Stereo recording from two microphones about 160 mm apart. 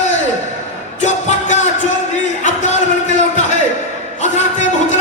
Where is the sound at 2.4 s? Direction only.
50° left (ahead or behind).